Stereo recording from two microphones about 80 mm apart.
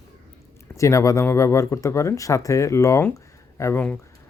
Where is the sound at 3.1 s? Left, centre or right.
Left.